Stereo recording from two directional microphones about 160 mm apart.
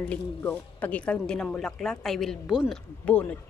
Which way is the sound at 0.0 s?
5° left (ahead or behind).